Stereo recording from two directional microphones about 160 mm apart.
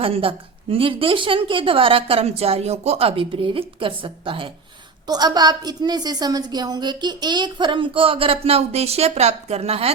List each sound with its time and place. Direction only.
0.0 s a woman's voice: 35° right (ahead or behind)